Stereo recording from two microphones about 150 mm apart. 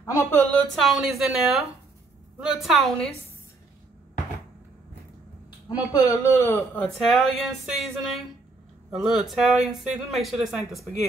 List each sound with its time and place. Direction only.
0.0 s speech: 20° left (ahead or behind)
0.7 s speech: centre (ahead or behind)
5.7 s speech: 25° left (ahead or behind)
6.9 s speech: centre (ahead or behind)